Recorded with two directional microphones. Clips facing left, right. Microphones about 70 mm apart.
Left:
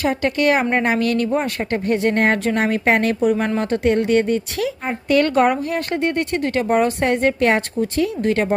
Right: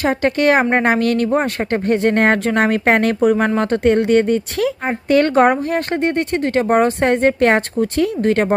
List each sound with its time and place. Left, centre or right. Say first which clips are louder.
0.0 s a woman's voice: right 3 dB; right